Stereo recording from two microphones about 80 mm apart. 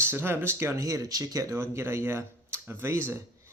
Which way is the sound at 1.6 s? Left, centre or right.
Right.